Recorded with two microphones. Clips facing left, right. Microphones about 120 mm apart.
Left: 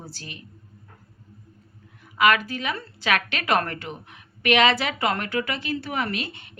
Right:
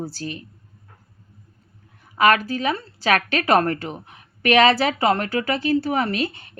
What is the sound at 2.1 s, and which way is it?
A woman's voice, 40° right (ahead or behind).